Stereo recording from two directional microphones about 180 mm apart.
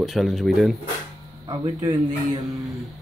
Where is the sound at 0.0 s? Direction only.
Centre (ahead or behind).